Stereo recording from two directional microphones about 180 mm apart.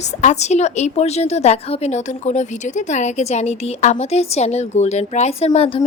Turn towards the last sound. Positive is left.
turn(degrees=30)  # may be behind; listen again after turning